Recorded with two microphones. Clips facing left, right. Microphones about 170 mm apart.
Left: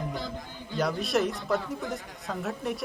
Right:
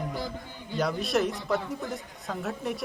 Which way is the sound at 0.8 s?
Centre (ahead or behind).